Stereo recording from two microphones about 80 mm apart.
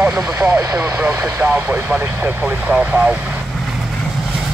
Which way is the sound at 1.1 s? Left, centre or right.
Right.